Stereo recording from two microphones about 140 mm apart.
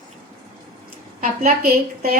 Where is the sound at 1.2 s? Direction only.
90° right.